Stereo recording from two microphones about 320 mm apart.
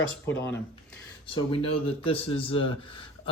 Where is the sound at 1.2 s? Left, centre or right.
Centre.